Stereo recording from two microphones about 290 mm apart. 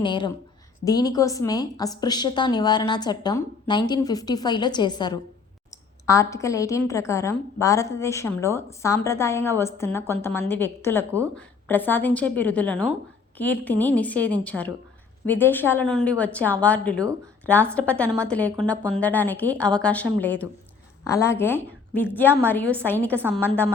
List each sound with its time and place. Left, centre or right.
0.0 s a woman's voice: centre